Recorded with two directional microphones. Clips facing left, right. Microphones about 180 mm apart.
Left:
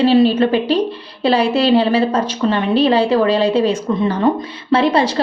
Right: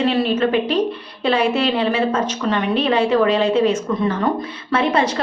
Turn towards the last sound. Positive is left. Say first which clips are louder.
# left 4 dB
turn(degrees=30)  # may be behind; listen again after turning